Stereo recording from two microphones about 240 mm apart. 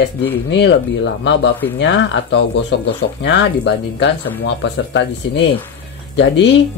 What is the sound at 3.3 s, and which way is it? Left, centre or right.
Speech, left.